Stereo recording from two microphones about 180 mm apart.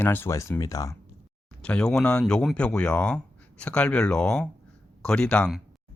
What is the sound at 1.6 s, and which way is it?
Speech, 5° left (ahead or behind).